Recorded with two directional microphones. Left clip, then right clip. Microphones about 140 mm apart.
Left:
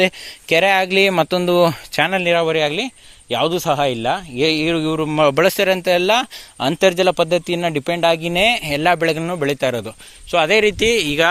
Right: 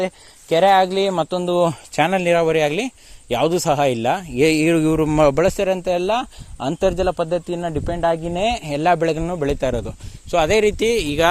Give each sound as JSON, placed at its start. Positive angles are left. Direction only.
{"t": 0.0, "sound": "speech", "side_deg": 80}
{"t": 1.1, "sound": "speech", "side_deg": 20}
{"t": 1.9, "sound": "speech", "side_deg": -10}
{"t": 2.2, "sound": "speech", "side_deg": -30}
{"t": 5.3, "sound": "speech", "side_deg": -10}